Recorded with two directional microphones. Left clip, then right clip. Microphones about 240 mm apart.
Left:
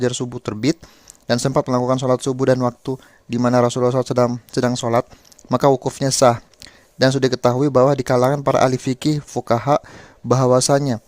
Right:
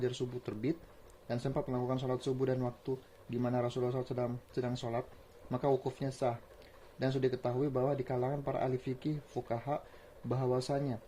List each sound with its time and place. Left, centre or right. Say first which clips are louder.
0.0 s speech: left 15 dB; left